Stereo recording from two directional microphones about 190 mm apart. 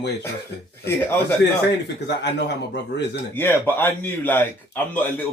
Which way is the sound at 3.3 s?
10° left (ahead or behind).